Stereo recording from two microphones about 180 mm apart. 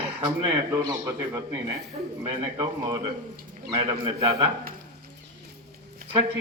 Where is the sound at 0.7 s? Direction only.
20° right (ahead or behind).